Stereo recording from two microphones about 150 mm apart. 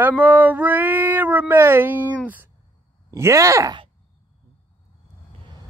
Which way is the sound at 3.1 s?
20° right (ahead or behind).